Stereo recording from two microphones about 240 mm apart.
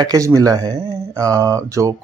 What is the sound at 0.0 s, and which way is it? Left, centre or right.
Speech, centre.